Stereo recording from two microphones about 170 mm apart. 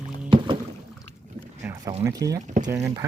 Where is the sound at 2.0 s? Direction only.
20° right (ahead or behind).